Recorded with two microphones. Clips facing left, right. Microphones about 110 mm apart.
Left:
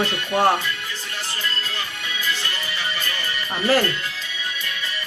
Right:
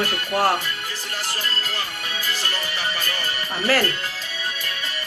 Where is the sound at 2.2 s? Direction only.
35° right (ahead or behind).